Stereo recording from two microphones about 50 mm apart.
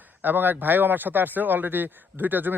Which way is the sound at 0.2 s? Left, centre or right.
Right.